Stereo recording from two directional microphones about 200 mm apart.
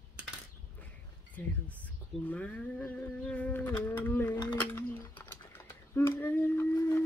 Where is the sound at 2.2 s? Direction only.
5° left (ahead or behind).